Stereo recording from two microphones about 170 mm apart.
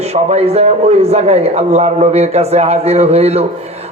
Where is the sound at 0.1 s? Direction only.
35° right (ahead or behind).